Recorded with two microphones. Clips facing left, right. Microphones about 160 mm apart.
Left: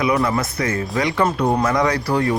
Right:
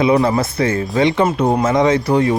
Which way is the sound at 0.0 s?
30° right (ahead or behind).